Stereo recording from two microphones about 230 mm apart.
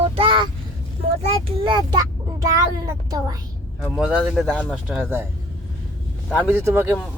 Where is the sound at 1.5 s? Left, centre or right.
Right.